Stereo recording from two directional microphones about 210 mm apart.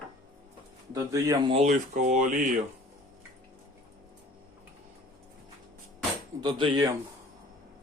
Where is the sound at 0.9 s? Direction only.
15° right (ahead or behind).